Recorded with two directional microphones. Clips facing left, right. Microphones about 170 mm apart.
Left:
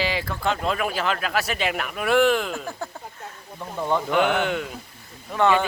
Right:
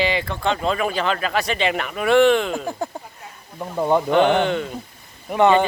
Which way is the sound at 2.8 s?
15° right (ahead or behind).